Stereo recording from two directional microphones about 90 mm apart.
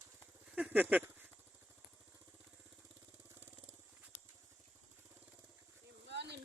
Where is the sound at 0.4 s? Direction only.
15° right (ahead or behind).